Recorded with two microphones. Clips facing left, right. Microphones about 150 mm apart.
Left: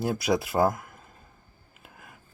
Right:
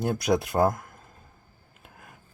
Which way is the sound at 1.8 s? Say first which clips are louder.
Even; centre (ahead or behind).